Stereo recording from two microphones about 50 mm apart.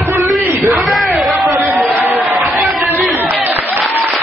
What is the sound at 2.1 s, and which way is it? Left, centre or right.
Crowd, centre.